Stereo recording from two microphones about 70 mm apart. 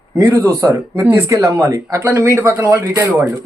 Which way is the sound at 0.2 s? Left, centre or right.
Right.